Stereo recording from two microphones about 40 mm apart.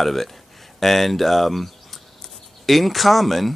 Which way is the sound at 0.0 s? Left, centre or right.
Centre.